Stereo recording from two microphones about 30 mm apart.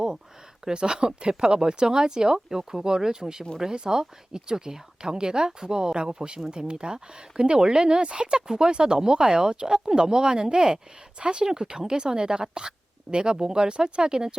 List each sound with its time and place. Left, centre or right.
0.7 s speech: right
11.2 s speech: right